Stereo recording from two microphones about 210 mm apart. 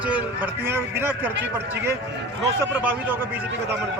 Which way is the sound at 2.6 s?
10° right (ahead or behind).